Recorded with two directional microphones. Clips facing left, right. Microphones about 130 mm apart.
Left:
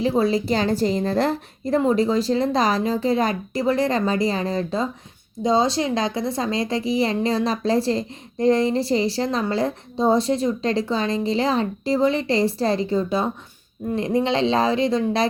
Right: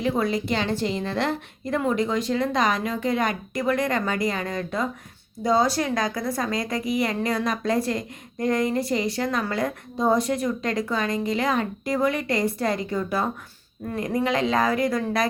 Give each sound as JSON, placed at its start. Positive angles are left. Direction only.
{"t": 0.0, "sound": "a woman's voice", "side_deg": 30}